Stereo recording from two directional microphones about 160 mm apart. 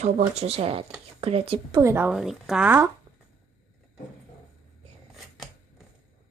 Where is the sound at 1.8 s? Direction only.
15° right (ahead or behind).